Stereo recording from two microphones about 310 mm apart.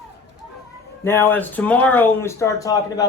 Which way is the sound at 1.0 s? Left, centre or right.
Centre.